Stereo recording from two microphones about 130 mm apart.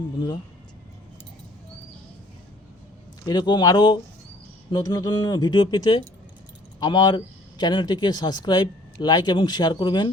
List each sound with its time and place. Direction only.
3.2 s speech: 35° left (ahead or behind)